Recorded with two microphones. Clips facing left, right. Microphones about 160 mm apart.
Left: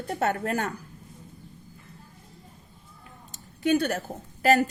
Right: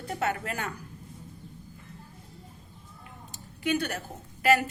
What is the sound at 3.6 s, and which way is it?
A woman's voice, 40° left (ahead or behind).